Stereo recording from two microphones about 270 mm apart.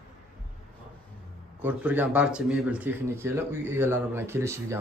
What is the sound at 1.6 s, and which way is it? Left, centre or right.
Speech, centre.